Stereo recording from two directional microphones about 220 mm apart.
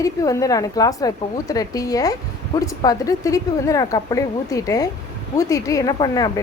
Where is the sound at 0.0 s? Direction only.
15° left (ahead or behind).